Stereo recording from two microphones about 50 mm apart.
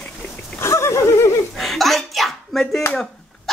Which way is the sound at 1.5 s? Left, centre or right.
Centre.